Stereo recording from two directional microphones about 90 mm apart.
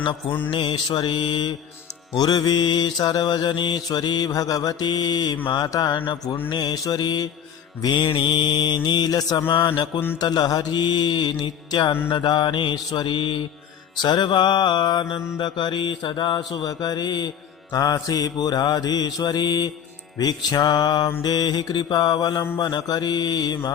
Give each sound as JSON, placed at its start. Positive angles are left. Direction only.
{"t": 0.0, "sound": "music", "side_deg": 65}
{"t": 2.1, "sound": "mantra", "side_deg": 50}
{"t": 7.8, "sound": "music", "side_deg": 55}
{"t": 9.5, "sound": "music", "side_deg": 60}
{"t": 13.9, "sound": "music", "side_deg": 55}
{"t": 16.5, "sound": "mantra", "side_deg": 50}